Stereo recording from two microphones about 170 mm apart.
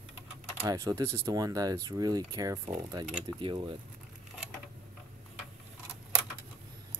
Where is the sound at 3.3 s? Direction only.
30° right (ahead or behind).